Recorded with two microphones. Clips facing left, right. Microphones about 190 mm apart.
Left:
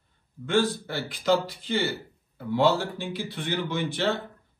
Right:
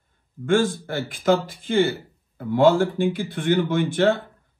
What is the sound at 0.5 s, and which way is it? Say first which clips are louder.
Speech: right 4 dB; 50° right (ahead or behind).